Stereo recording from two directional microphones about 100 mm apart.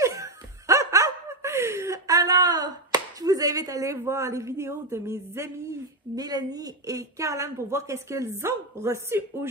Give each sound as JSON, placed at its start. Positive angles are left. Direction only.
{"t": 0.0, "sound": "laughter", "side_deg": -30}
{"t": 6.1, "sound": "speech", "side_deg": -40}